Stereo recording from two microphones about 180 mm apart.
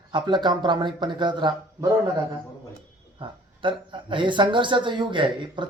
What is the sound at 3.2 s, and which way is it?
Speech, 25° right (ahead or behind).